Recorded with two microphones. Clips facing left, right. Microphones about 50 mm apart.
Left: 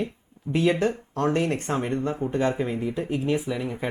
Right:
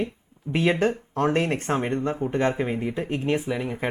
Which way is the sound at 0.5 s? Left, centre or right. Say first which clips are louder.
Even; right.